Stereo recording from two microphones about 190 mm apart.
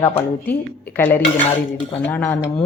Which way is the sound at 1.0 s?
10° left (ahead or behind).